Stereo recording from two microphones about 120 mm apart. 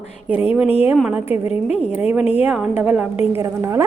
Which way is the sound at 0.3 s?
15° right (ahead or behind).